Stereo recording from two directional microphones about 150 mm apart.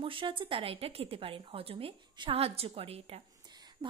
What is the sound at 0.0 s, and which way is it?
A woman's voice, 35° right (ahead or behind).